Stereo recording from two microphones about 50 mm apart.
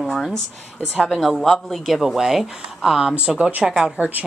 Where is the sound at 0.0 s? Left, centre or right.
Centre.